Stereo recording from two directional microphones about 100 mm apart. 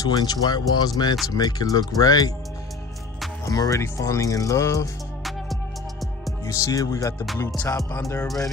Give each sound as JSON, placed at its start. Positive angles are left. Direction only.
{"t": 0.0, "sound": "speech", "side_deg": 45}
{"t": 3.4, "sound": "speech", "side_deg": 35}
{"t": 6.4, "sound": "speech", "side_deg": 30}
{"t": 7.7, "sound": "music", "side_deg": 25}